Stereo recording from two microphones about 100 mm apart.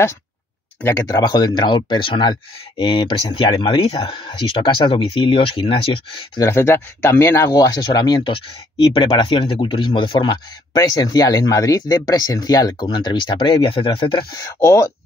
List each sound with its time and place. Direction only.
0.8 s speech: 35° left (ahead or behind); by 5.8 s 60° left (ahead or behind)
6.4 s speech: 25° left (ahead or behind)
12.9 s speech: 50° left (ahead or behind)
14.3 s speech: 35° left (ahead or behind)